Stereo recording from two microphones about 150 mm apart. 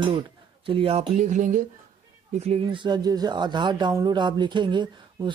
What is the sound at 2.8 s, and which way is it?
Speech, 25° right (ahead or behind).